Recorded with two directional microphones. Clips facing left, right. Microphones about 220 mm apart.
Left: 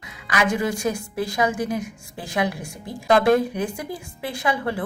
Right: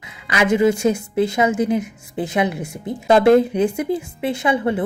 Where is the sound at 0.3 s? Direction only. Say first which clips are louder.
Right 7 dB; 25° right (ahead or behind).